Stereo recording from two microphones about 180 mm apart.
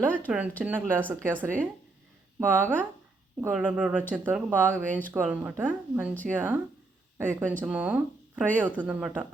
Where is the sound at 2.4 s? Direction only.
10° right (ahead or behind).